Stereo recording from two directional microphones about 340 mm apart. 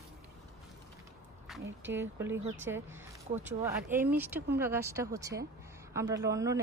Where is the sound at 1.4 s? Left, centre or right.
Centre.